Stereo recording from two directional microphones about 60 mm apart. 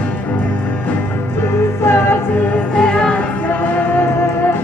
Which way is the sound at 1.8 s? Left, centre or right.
Left.